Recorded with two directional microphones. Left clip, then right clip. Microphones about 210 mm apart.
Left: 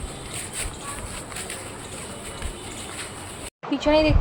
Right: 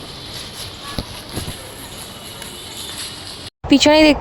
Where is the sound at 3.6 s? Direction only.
50° right (ahead or behind).